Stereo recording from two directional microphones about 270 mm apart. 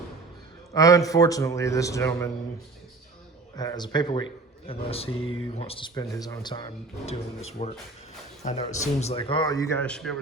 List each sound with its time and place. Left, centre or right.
0.7 s a man's voice: centre
3.5 s a man's voice: centre